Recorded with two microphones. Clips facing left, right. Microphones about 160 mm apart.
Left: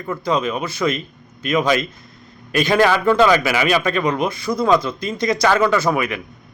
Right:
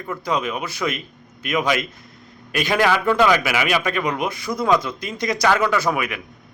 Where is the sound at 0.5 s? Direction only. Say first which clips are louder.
Left 4 dB; 20° left (ahead or behind).